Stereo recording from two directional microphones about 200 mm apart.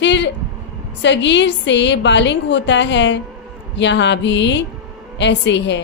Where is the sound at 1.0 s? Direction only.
60° left (ahead or behind).